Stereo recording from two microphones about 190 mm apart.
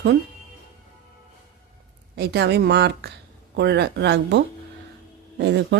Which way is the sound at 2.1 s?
60° right (ahead or behind).